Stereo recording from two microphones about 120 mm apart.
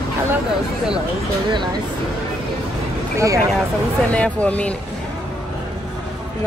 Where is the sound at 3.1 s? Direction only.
25° right (ahead or behind).